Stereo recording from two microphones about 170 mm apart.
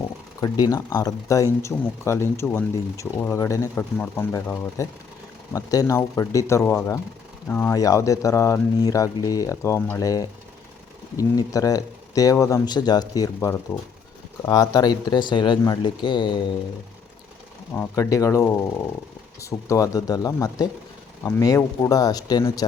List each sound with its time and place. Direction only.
0.4 s speech: 25° left (ahead or behind)
17.7 s speech: 15° left (ahead or behind)